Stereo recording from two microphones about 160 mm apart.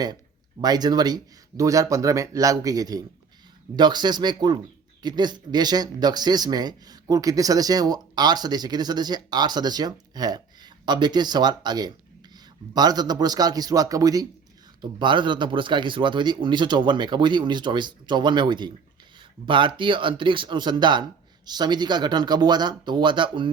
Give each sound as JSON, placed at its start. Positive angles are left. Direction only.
{"t": 0.6, "sound": "speech", "side_deg": -25}